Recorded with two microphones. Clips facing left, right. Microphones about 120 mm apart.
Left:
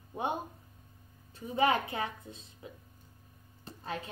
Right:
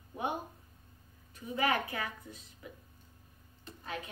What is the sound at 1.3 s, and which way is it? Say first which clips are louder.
A woman's voice: left 4 dB; 25° left (ahead or behind).